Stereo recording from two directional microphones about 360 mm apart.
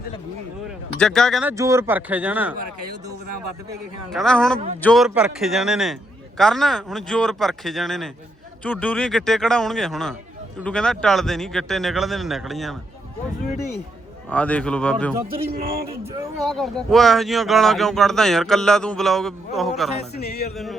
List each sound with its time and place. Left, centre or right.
0.9 s speech: centre
4.1 s speech: centre
14.3 s speech: centre
16.4 s speech: centre
20.1 s a sound: left